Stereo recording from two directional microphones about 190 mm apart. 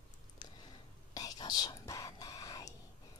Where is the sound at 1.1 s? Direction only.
20° left (ahead or behind).